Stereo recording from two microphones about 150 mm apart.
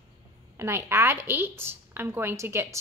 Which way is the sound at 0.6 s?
15° right (ahead or behind).